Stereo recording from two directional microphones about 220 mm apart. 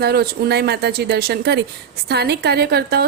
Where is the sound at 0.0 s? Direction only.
45° right (ahead or behind).